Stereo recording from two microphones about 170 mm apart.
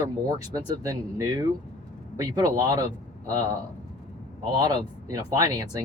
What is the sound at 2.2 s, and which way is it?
Speech, 20° right (ahead or behind).